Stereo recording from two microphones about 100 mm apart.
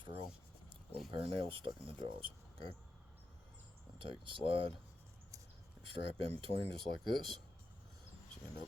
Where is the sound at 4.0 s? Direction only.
60° right (ahead or behind).